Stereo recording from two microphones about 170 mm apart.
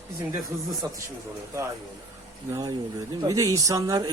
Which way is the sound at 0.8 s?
20° right (ahead or behind).